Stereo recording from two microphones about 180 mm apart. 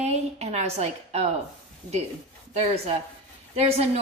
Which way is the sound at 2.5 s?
35° right (ahead or behind).